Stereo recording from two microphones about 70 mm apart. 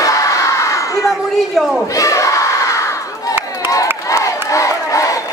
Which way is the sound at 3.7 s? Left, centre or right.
Left.